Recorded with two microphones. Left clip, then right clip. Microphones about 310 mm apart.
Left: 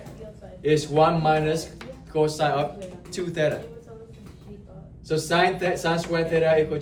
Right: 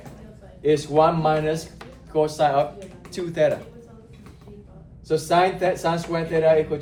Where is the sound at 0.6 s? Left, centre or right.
Right.